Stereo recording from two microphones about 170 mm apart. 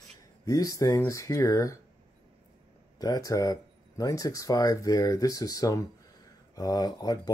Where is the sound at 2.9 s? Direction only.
20° left (ahead or behind).